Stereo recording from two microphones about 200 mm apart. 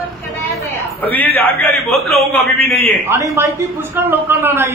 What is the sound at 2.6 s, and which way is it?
Speech, 50° left (ahead or behind).